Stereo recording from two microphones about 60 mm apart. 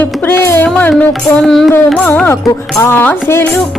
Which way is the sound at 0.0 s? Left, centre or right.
Left.